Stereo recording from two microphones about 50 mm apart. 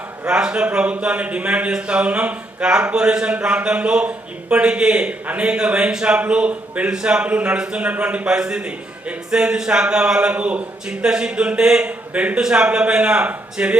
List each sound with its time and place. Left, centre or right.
0.3 s a man's voice: centre
5.2 s speech: right
5.5 s a man's voice: centre